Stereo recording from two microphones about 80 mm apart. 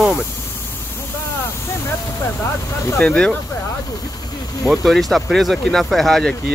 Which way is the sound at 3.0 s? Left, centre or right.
Centre.